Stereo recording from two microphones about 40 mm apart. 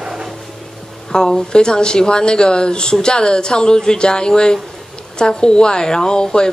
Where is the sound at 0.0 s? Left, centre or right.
Centre.